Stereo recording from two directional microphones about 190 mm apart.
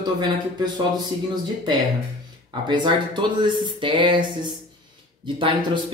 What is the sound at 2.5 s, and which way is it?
Speech, 25° right (ahead or behind).